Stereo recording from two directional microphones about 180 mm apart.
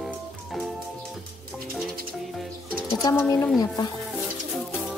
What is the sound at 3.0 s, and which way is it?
Speech, 20° left (ahead or behind).